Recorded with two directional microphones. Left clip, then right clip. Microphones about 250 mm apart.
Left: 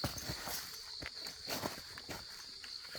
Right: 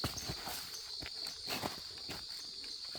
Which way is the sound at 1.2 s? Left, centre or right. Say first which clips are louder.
Right 1 dB; centre.